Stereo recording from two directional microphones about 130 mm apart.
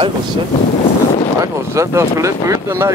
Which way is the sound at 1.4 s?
25° right (ahead or behind).